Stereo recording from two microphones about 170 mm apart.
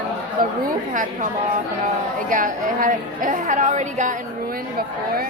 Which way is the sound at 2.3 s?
50° right (ahead or behind).